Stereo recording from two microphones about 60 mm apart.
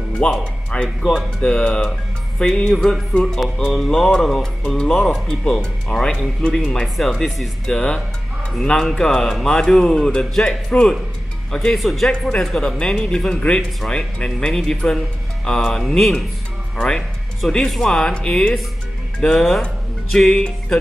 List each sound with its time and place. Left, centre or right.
0.4 s speech: centre
1.9 s music: centre
2.8 s speech: centre